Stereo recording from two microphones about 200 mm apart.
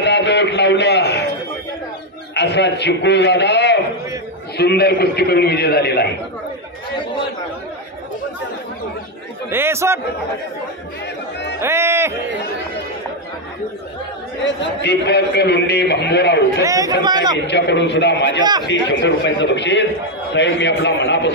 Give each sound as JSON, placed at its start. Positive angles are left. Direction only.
{"t": 0.0, "sound": "a sound", "side_deg": 60}
{"t": 2.3, "sound": "a man's voice", "side_deg": 60}
{"t": 9.5, "sound": "a man's voice", "side_deg": -10}
{"t": 11.6, "sound": "a man's voice", "side_deg": -15}
{"t": 14.4, "sound": "a man's voice", "side_deg": 60}
{"t": 16.6, "sound": "a man's voice", "side_deg": -15}
{"t": 17.5, "sound": "a man's voice", "side_deg": 60}